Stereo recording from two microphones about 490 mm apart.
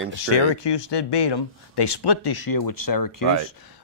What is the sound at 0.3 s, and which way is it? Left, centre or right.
Speech, left.